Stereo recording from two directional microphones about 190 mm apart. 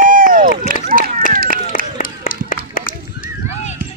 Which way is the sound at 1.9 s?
45° left (ahead or behind).